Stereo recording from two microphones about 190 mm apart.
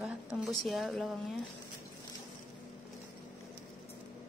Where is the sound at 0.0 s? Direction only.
5° right (ahead or behind).